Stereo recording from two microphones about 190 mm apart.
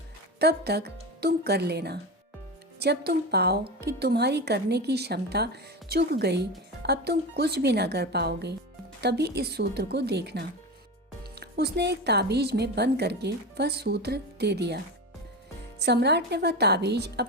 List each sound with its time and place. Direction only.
0.3 s speech: 60° right (ahead or behind)
15.8 s speech: 60° right (ahead or behind)